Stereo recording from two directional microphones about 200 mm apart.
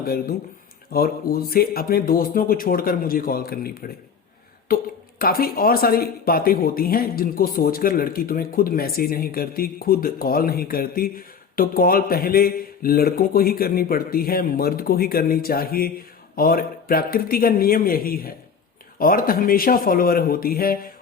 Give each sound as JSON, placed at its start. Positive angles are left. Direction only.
{"t": 0.0, "sound": "speech", "side_deg": 50}